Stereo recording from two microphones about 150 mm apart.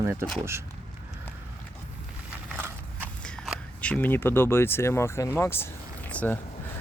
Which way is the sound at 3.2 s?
5° left (ahead or behind).